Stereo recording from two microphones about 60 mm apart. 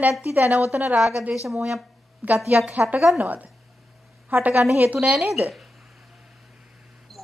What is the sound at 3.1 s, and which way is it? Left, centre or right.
A woman's voice, right.